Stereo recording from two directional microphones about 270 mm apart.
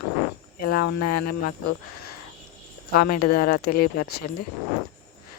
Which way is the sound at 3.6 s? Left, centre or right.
Left.